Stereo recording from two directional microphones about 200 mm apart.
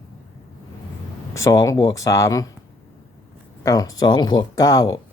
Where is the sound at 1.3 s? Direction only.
15° left (ahead or behind).